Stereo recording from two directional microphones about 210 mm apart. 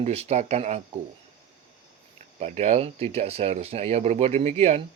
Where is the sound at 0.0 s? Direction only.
30° right (ahead or behind).